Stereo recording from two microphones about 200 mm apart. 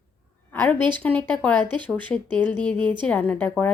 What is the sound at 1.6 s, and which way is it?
Speech, 25° right (ahead or behind).